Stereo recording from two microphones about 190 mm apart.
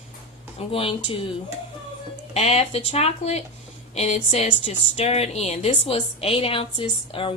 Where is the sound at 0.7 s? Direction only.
30° left (ahead or behind).